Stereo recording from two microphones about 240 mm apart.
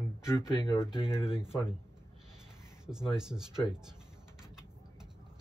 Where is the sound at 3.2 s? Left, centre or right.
Centre.